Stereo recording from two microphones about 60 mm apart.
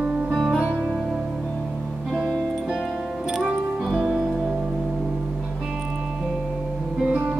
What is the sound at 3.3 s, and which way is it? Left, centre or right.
Music, centre.